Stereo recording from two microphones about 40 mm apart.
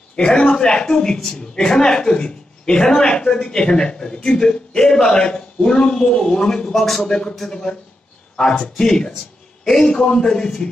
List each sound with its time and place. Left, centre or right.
0.1 s a woman's voice: left
6.7 s speech: centre
7.1 s a woman's voice: left